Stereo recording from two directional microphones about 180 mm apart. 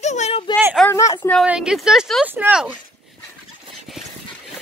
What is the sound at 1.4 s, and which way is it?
Speech, 5° right (ahead or behind).